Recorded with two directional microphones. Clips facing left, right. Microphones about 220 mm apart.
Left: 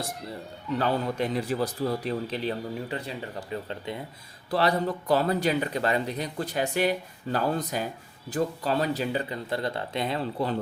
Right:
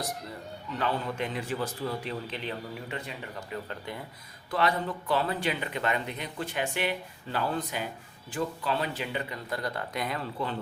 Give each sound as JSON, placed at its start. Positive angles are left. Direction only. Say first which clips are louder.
{"t": 0.8, "sound": "speech", "louder": "left 4 dB", "side_deg": 40}
{"t": 4.5, "sound": "speech", "louder": "left 4 dB", "side_deg": 35}